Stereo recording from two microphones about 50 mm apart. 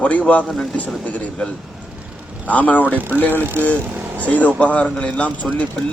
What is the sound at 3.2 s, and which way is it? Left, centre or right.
Speech, left.